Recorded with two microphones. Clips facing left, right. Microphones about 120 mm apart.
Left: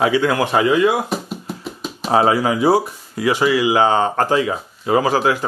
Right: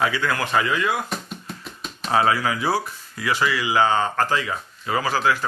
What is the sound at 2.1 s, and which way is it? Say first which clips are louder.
Speech: left 5 dB; 20° left (ahead or behind).